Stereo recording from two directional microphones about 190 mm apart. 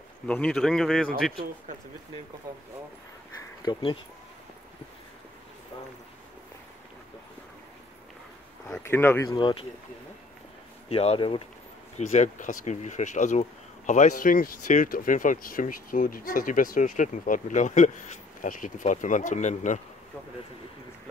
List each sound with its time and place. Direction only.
0.3 s speech: 5° left (ahead or behind)
2.5 s speech: 15° right (ahead or behind)
3.6 s speech: 25° left (ahead or behind)
8.8 s speech: 10° left (ahead or behind)
10.9 s speech: 30° left (ahead or behind)
12.1 s speech: 40° left (ahead or behind)